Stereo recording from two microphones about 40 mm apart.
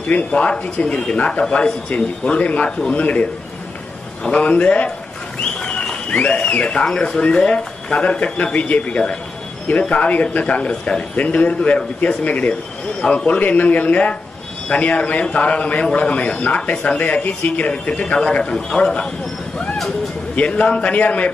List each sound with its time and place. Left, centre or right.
0.3 s speech: left
1.2 s a man's voice: centre
1.5 s a man's voice: left
4.3 s a man's voice: left
5.4 s a sound: left
6.4 s speech: left
8.9 s a man's voice: left
10.5 s speech: left
11.1 s a man's voice: left
13.0 s speech: left
13.3 s a man's voice: left
16.4 s a man's voice: left
18.3 s a man's voice: centre
20.3 s a man's voice: left